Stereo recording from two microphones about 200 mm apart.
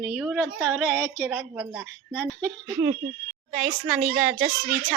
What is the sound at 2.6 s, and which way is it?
Speech, 20° right (ahead or behind).